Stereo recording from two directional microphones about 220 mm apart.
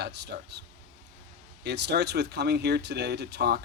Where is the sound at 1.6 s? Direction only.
50° right (ahead or behind).